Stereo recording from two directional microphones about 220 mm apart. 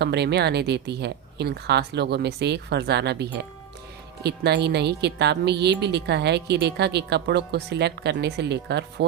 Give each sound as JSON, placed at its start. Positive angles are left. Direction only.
{"t": 0.0, "sound": "speech", "side_deg": -50}